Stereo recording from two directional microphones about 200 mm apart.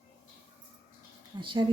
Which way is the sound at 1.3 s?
25° right (ahead or behind).